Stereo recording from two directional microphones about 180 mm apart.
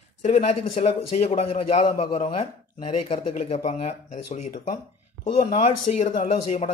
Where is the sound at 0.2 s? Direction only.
40° left (ahead or behind).